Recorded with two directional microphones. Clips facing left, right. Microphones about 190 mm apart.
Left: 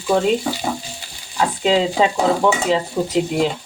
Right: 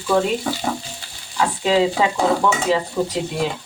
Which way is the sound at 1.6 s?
20° left (ahead or behind).